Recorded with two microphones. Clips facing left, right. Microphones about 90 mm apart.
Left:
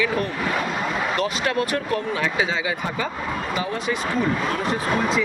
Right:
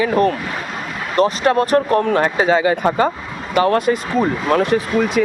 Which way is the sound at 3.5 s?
65° right (ahead or behind).